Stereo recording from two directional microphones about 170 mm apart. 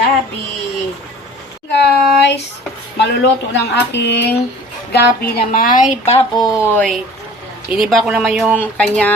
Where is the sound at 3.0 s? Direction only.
90° left.